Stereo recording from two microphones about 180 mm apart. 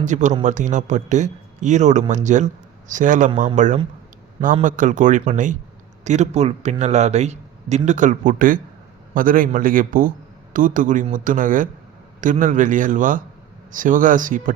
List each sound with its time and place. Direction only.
0.0 s a man's voice: 40° right (ahead or behind)